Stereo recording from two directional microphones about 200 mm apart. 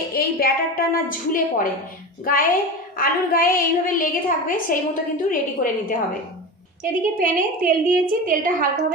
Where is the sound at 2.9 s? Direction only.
45° left (ahead or behind).